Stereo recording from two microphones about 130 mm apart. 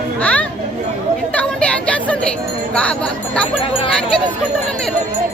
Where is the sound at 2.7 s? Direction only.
10° left (ahead or behind).